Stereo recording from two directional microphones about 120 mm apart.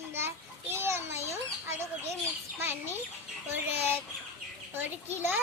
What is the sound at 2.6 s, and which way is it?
A child's voice, 15° right (ahead or behind).